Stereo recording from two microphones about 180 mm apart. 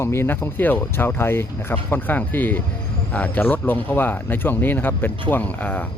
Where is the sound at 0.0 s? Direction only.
15° left (ahead or behind).